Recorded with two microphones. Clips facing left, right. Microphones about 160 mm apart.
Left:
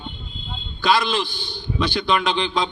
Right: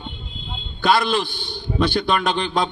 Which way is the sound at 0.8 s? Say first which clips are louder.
Right 1 dB; 55° right (ahead or behind).